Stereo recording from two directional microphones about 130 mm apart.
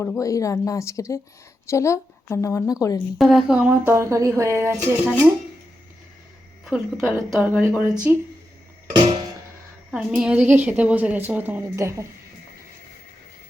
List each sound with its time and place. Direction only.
0.0 s a woman's voice: 25° left (ahead or behind)
3.2 s a woman's voice: centre (ahead or behind)
3.9 s speech: 25° right (ahead or behind)
5.0 s a woman's voice: 10° right (ahead or behind)
6.7 s a woman's voice: 5° right (ahead or behind)
9.9 s a woman's voice: 5° right (ahead or behind); by 12.0 s 20° right (ahead or behind)